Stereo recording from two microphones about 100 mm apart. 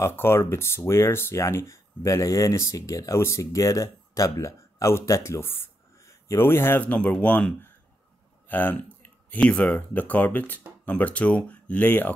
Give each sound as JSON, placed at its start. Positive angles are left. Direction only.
{"t": 0.0, "sound": "speech", "side_deg": 25}